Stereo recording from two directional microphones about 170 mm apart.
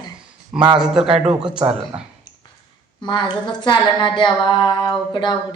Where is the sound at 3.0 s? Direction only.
25° left (ahead or behind).